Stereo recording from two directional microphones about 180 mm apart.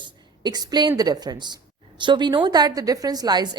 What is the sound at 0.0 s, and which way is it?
A woman's voice, 25° right (ahead or behind).